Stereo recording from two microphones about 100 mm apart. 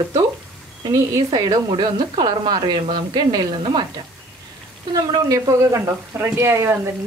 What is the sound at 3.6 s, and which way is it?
Speech, 60° right (ahead or behind).